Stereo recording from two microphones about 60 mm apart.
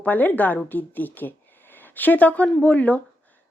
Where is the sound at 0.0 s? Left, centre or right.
Left.